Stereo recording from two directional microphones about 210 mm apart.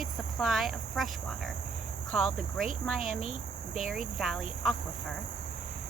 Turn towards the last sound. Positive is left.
turn(degrees=0)  # may be behind; listen again after turning